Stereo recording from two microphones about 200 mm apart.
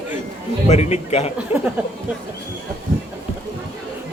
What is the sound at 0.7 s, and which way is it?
Speech, 35° left (ahead or behind).